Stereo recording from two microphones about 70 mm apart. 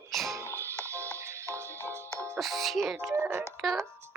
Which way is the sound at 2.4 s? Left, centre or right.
Centre.